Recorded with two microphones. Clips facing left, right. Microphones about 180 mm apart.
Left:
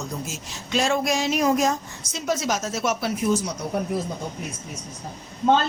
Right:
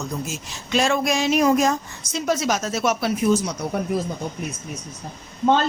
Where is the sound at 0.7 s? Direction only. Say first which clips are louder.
Right 2 dB; 75° right (ahead or behind).